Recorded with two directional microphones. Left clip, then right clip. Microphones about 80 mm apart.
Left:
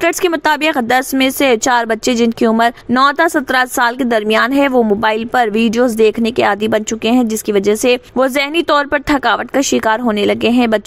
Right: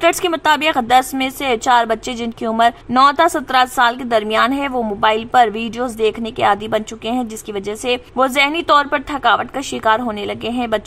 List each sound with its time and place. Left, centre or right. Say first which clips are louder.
0.0 s a woman's voice: left 1 dB; left
9.6 s a woman's voice: left 3 dB; left